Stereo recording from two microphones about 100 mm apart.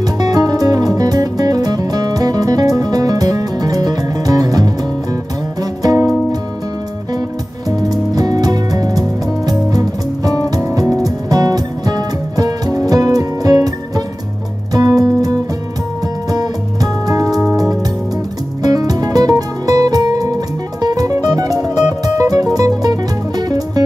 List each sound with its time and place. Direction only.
0.0 s music: 40° right (ahead or behind)
8.1 s music: 40° right (ahead or behind)
16.8 s music: 35° right (ahead or behind)
18.6 s music: 40° right (ahead or behind)